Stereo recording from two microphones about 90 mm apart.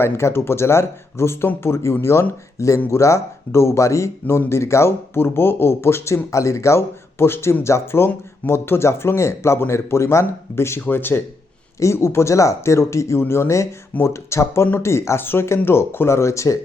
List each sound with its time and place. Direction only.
0.0 s speech: 30° left (ahead or behind)